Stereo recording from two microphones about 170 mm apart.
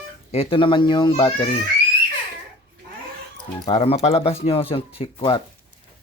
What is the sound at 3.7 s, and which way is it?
Speech, 40° left (ahead or behind).